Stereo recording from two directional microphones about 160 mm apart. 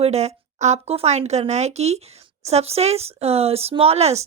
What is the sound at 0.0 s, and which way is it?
Speech, 40° right (ahead or behind).